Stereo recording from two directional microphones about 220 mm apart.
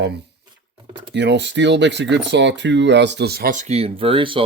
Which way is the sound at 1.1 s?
50° right (ahead or behind).